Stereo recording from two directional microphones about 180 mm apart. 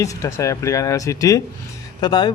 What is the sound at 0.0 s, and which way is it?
Speech, 20° left (ahead or behind).